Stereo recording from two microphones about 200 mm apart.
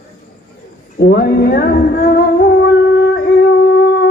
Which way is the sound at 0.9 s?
55° left (ahead or behind).